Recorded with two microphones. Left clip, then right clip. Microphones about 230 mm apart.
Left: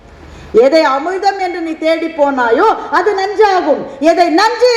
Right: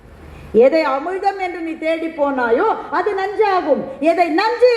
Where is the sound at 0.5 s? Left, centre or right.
Left.